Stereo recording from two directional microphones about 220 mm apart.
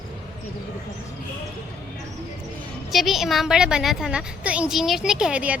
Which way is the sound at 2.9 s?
Centre (ahead or behind).